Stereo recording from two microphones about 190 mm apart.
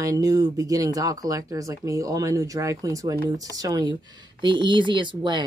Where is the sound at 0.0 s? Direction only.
20° right (ahead or behind).